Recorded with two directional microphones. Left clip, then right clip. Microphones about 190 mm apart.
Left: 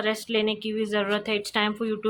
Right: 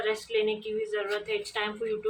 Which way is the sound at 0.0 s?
55° left (ahead or behind).